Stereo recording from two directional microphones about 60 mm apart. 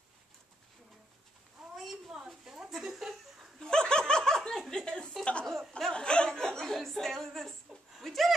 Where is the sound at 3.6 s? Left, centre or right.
Centre.